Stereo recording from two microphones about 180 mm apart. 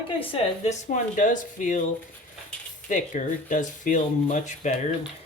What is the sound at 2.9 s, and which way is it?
Speech, 45° left (ahead or behind).